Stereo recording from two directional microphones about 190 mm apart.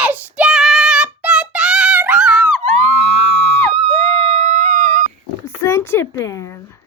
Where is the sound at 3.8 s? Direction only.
30° right (ahead or behind).